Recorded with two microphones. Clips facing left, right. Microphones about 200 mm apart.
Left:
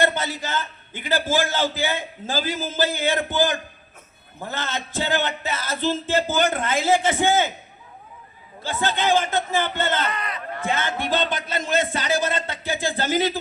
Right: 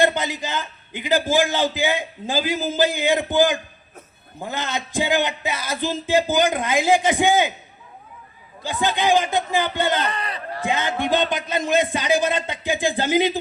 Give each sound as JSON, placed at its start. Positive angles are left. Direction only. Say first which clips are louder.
{"t": 0.0, "sound": "a man's voice", "louder": "right 3 dB", "side_deg": -15}
{"t": 8.6, "sound": "a man's voice", "louder": "right 2 dB", "side_deg": -15}
{"t": 10.1, "sound": "speech", "louder": "right 1 dB", "side_deg": -30}
{"t": 10.7, "sound": "a man's voice", "louder": "right 3 dB", "side_deg": -15}